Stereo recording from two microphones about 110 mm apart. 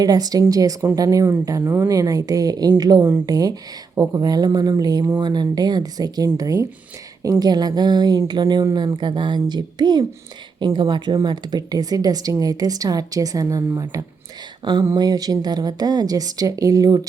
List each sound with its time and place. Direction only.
0.0 s speech: 35° right (ahead or behind)
14.6 s speech: 45° right (ahead or behind)